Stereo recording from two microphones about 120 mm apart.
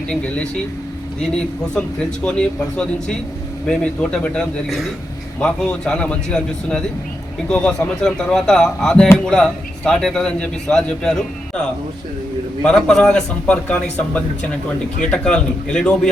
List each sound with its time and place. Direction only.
0.1 s a man's voice: 10° left (ahead or behind)
12.6 s a man's voice: 5° left (ahead or behind)